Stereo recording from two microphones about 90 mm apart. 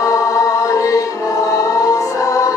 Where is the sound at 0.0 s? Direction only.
40° left (ahead or behind).